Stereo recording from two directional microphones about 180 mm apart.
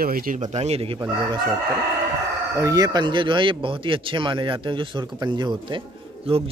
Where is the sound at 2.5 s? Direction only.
20° right (ahead or behind).